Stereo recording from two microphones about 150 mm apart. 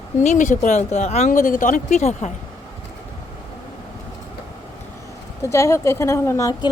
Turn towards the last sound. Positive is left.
turn(degrees=20)  # may be behind; listen again after turning